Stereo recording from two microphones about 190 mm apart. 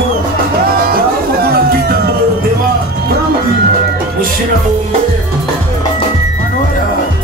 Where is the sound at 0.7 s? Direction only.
50° right (ahead or behind).